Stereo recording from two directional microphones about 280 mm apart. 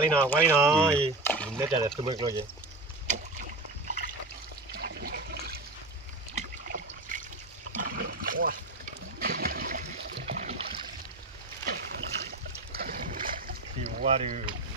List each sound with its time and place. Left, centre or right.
0.1 s speech: centre
0.8 s speech: centre
1.2 s a sound: centre
1.8 s speech: centre
3.1 s boat: right
4.7 s toilet flush: right
6.3 s rowboat: right
9.2 s a sound: right
11.6 s boat: right